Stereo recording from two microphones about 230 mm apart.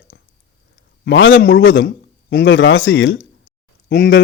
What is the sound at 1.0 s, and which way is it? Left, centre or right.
A man's voice, left.